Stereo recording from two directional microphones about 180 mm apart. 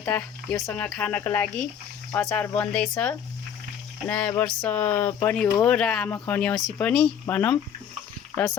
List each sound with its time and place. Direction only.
0.2 s speech: 5° left (ahead or behind)